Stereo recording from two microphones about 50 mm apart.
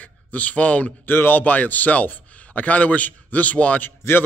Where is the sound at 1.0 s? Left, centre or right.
Left.